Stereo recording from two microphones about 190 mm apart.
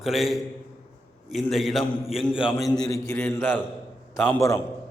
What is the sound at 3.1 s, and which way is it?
A man's voice, 10° left (ahead or behind).